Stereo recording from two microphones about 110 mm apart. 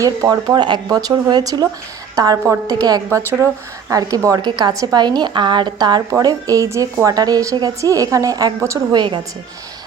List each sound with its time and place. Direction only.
0.0 s a woman's voice: 35° right (ahead or behind)
8.9 s a woman's voice: 45° right (ahead or behind)